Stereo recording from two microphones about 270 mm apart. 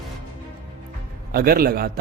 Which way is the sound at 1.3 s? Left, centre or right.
Right.